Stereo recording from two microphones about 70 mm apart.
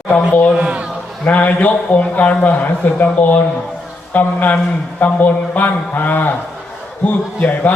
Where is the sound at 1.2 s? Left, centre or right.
Left.